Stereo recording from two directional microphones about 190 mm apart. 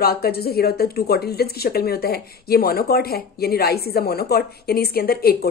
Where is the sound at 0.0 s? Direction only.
55° left (ahead or behind).